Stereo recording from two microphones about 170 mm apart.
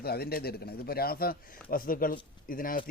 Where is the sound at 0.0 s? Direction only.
65° left (ahead or behind).